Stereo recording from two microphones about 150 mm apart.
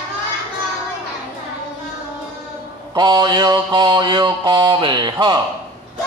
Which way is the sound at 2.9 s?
30° right (ahead or behind).